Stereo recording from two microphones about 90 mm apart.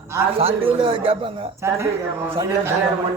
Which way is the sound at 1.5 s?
30° right (ahead or behind).